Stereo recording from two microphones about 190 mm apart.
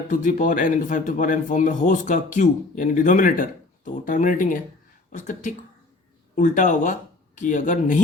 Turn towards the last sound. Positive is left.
turn(degrees=40)  # may be behind; listen again after turning